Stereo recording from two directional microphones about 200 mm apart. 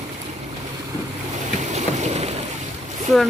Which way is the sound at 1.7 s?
35° right (ahead or behind).